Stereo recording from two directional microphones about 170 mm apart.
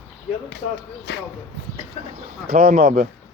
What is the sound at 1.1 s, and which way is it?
Speech, 75° left (ahead or behind).